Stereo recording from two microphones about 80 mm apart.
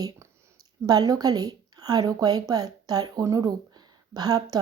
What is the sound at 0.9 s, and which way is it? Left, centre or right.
A woman's voice, right.